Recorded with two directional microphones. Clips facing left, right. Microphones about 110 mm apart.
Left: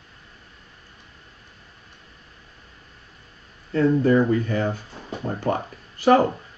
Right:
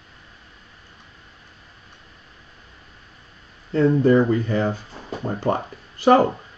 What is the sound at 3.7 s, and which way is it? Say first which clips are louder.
Speech: right 2 dB; 25° right (ahead or behind).